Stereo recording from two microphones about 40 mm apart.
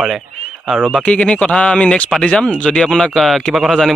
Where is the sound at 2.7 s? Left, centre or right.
Centre.